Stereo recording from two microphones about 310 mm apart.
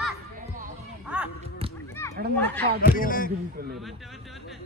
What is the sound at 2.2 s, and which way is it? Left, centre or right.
Speech, right.